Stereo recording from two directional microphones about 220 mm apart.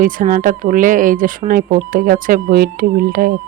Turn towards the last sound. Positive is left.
turn(degrees=-40)  # may be behind; listen again after turning